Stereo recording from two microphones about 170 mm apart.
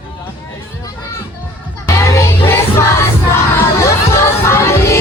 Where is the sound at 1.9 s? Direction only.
15° left (ahead or behind).